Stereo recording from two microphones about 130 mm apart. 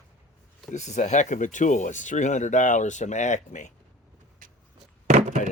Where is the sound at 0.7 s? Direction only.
65° left (ahead or behind).